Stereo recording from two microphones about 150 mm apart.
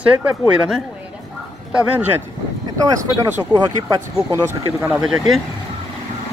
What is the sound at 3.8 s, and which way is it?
Speech, 20° right (ahead or behind).